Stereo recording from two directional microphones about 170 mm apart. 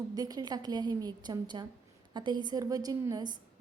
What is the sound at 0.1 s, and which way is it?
A woman's voice, 25° right (ahead or behind).